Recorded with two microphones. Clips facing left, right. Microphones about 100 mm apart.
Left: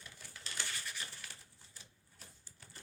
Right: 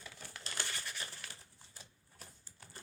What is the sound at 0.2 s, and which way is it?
Crumpling, 65° right (ahead or behind).